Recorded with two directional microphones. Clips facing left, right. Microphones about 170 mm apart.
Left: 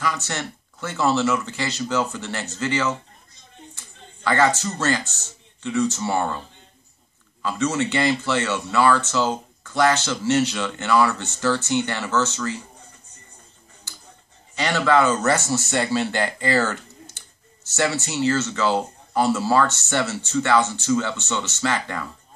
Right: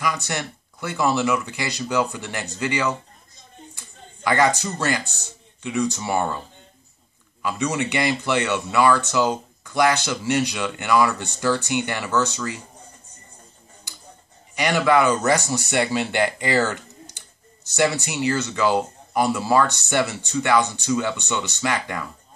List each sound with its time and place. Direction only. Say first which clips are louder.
0.0 s speech: right 1 dB; 15° right (ahead or behind)
7.4 s speech: left 1 dB; 15° right (ahead or behind)
13.9 s tick-tock: left 1 dB; 15° right (ahead or behind)
14.5 s speech: right 1 dB; 15° right (ahead or behind)